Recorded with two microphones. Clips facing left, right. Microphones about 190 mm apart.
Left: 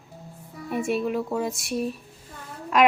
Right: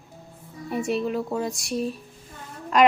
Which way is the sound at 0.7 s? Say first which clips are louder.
Even; centre (ahead or behind).